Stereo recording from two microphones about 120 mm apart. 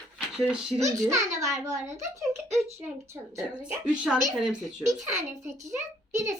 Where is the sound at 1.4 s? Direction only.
30° right (ahead or behind).